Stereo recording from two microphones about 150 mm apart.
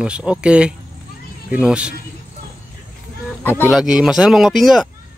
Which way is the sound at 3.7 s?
5° right (ahead or behind).